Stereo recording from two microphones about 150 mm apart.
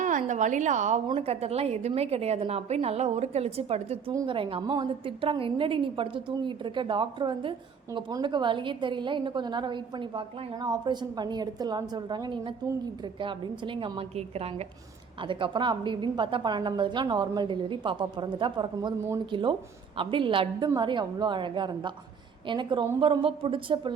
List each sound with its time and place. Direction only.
0.0 s a woman's voice: 55° right (ahead or behind)
1.0 s a woman's voice: 40° right (ahead or behind)